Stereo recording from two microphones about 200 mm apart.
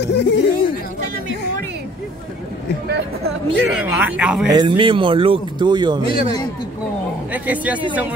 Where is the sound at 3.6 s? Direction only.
5° right (ahead or behind).